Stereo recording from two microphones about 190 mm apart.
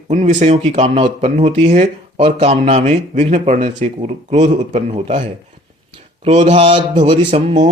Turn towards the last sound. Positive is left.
turn(degrees=-35)  # may be behind; listen again after turning